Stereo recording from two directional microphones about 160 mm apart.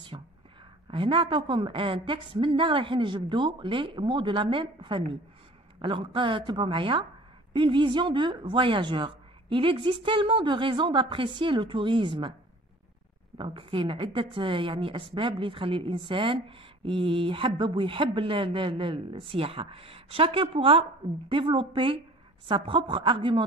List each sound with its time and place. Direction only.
0.1 s a woman's voice: 30° right (ahead or behind)
13.4 s a woman's voice: 30° right (ahead or behind)